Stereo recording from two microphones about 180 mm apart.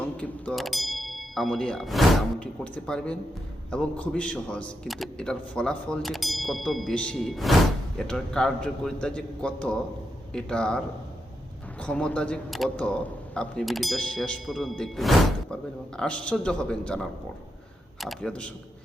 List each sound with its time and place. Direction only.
0.0 s a man's voice: 5° left (ahead or behind)